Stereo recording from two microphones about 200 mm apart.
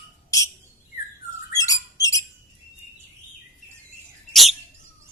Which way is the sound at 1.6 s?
15° left (ahead or behind).